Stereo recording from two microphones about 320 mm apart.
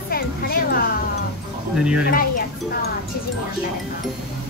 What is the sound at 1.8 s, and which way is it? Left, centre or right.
Speech, centre.